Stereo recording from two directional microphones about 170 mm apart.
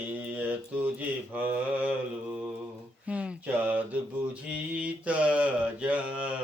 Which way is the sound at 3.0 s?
5° right (ahead or behind).